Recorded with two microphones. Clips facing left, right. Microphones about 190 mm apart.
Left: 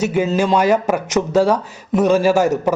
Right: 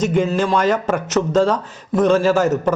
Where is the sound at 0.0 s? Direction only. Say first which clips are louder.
Even; 5° left (ahead or behind).